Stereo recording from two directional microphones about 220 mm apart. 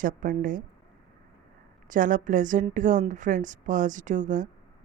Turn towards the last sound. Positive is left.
turn(degrees=-35)  # may be behind; listen again after turning